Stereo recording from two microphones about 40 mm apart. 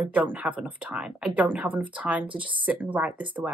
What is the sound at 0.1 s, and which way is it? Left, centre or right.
Speech, right.